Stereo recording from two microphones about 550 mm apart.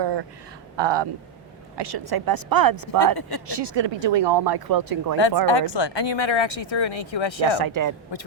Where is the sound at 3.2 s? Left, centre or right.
Left.